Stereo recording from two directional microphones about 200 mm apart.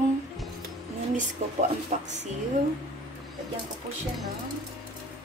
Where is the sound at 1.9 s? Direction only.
35° right (ahead or behind).